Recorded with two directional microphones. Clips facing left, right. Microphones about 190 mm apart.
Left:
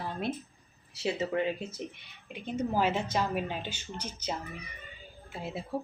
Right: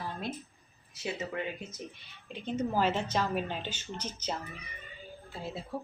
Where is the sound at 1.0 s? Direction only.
30° left (ahead or behind).